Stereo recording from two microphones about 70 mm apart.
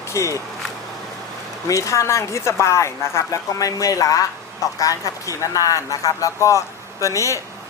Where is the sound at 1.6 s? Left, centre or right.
Left.